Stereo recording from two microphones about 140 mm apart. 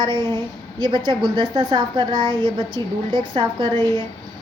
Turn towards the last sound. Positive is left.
turn(degrees=-35)  # may be behind; listen again after turning